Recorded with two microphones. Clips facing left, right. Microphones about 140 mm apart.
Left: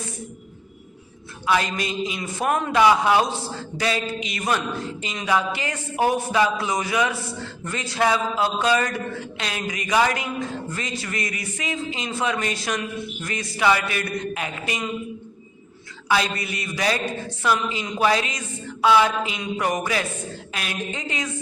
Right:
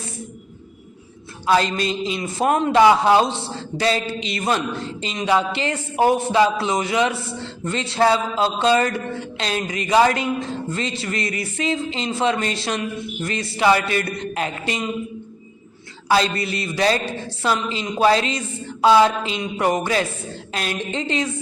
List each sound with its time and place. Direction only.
1.5 s a man's voice: 30° right (ahead or behind)
16.0 s a man's voice: 30° right (ahead or behind)